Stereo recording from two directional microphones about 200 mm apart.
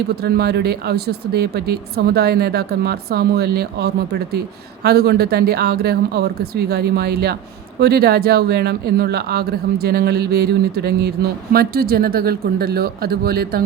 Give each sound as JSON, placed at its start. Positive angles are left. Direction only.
{"t": 0.2, "sound": "speech", "side_deg": -55}